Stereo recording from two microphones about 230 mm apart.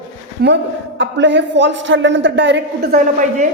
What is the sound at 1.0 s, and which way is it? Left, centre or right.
A man's voice, right.